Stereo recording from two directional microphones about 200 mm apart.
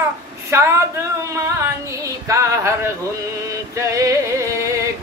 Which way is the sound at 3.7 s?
15° right (ahead or behind).